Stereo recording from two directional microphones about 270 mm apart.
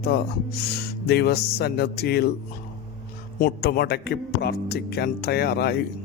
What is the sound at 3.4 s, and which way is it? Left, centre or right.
Speech, left.